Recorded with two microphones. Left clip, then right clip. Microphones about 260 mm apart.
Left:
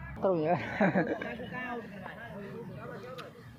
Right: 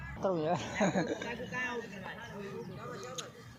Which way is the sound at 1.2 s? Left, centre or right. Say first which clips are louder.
Right 1 dB; right.